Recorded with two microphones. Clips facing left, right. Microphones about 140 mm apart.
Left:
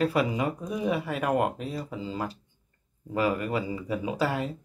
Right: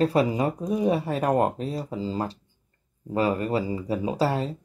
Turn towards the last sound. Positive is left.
turn(degrees=-30)  # may be behind; listen again after turning